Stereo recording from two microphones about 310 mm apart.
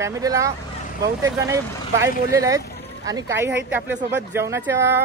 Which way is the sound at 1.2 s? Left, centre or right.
Centre.